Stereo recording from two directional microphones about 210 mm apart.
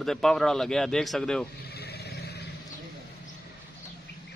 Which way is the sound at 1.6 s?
50° left (ahead or behind).